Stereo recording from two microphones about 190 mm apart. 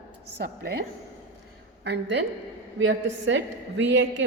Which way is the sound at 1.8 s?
65° right (ahead or behind).